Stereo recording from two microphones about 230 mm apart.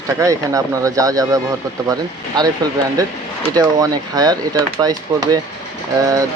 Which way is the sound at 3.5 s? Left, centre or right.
Centre.